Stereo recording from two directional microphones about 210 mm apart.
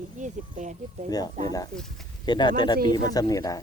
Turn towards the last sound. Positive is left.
turn(degrees=15)  # may be behind; listen again after turning